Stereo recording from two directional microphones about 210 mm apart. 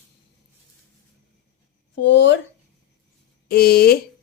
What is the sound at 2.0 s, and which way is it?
Speech, 55° left (ahead or behind).